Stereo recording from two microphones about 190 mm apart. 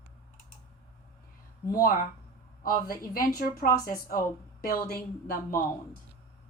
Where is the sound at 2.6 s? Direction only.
50° left (ahead or behind).